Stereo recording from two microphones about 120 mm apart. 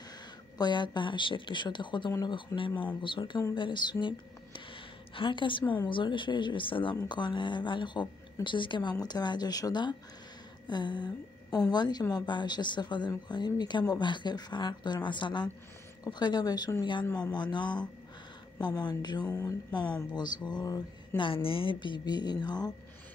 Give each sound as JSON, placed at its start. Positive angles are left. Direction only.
{"t": 0.6, "sound": "speech", "side_deg": 40}
{"t": 2.7, "sound": "speech", "side_deg": 15}
{"t": 3.0, "sound": "speech", "side_deg": 45}
{"t": 4.6, "sound": "a sound", "side_deg": 45}
{"t": 5.9, "sound": "speech", "side_deg": 45}
{"t": 18.8, "sound": "speech", "side_deg": 35}
{"t": 21.2, "sound": "speech", "side_deg": 50}